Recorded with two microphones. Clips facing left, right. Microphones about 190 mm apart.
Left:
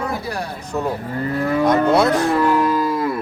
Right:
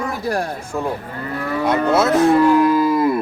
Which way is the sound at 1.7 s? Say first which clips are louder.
Right 1 dB; 5° right (ahead or behind).